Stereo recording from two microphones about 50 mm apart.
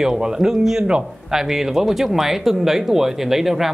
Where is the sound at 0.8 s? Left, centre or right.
Centre.